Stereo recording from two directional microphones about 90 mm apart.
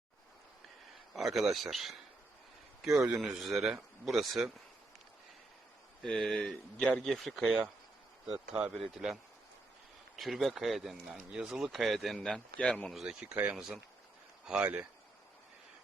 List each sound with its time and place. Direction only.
1.1 s speech: 5° right (ahead or behind)
6.0 s speech: 10° left (ahead or behind)
8.8 s speech: 5° right (ahead or behind)
10.2 s speech: centre (ahead or behind)